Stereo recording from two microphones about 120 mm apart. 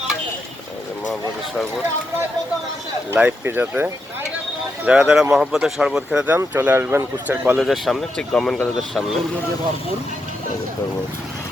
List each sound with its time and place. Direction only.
3.1 s speech: 20° right (ahead or behind)
4.9 s speech: 5° right (ahead or behind)
7.6 s speech: centre (ahead or behind)